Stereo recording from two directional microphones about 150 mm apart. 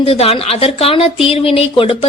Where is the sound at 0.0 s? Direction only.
40° left (ahead or behind).